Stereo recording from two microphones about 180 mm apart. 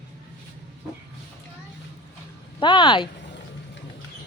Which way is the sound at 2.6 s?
25° left (ahead or behind).